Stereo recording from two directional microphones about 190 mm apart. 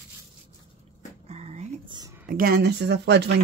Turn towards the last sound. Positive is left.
turn(degrees=-65)  # may be behind; listen again after turning